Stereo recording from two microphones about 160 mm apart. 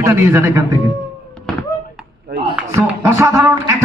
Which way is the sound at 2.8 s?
20° right (ahead or behind).